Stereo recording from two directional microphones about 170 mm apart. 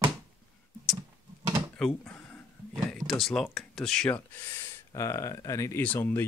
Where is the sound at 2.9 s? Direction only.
Centre (ahead or behind).